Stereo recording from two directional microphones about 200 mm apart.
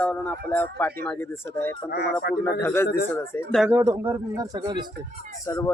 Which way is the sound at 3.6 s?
10° right (ahead or behind).